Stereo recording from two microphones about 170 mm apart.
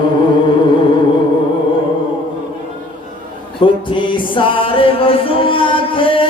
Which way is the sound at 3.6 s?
30° left (ahead or behind).